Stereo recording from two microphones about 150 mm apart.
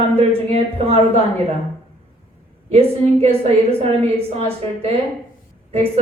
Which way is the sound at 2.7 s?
40° right (ahead or behind).